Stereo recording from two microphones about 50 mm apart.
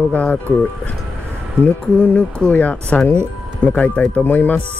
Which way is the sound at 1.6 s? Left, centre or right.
Left.